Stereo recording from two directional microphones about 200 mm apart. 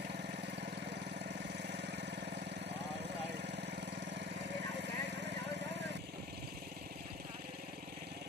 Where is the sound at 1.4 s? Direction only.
60° right (ahead or behind).